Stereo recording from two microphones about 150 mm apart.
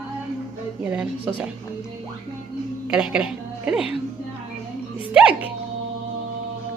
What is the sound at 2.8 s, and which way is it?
A woman's voice, 5° right (ahead or behind).